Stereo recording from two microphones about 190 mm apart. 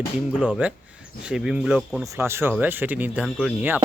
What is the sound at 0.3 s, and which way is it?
A man's voice, centre (ahead or behind).